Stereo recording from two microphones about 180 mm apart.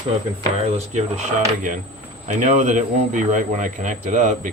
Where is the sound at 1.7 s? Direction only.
45° right (ahead or behind).